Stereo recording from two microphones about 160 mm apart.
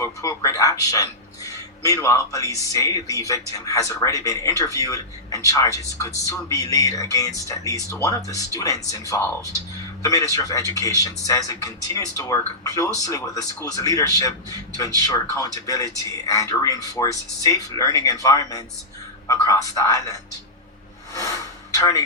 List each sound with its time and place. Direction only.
0.0 s speech: 20° left (ahead or behind)
21.1 s a sound: 20° left (ahead or behind)
21.8 s a man's voice: 20° left (ahead or behind)